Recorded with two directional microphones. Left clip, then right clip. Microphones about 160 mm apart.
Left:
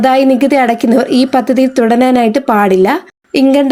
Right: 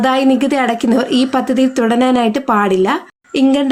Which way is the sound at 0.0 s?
25° left (ahead or behind).